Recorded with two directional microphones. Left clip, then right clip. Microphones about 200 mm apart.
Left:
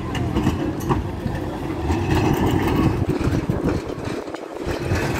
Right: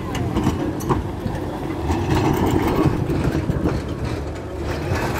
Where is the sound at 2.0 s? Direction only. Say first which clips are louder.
Right 1 dB; 5° right (ahead or behind).